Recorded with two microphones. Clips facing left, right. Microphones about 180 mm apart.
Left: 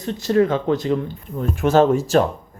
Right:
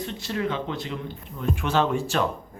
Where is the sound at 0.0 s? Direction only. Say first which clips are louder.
Left 11 dB; 40° left (ahead or behind).